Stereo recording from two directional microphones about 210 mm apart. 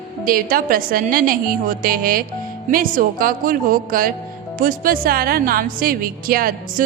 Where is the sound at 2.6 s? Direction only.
40° right (ahead or behind).